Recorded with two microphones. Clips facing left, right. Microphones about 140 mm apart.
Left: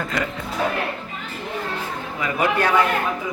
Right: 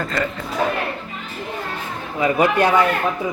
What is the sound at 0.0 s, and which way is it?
Speech, 10° left (ahead or behind).